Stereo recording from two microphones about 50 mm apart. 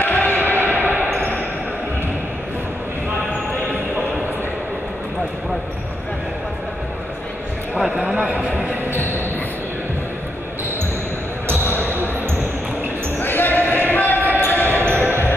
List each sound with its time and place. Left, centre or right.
0.0 s a sound: left
0.6 s basketball bounce: right
7.9 s a sound: centre
11.6 s basketball bounce: left
13.2 s basketball bounce: left
14.9 s basketball bounce: right